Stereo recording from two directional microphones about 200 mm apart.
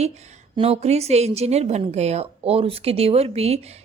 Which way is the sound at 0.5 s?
30° right (ahead or behind).